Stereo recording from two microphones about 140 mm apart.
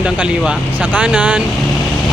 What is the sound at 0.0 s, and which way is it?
Speech, 10° right (ahead or behind).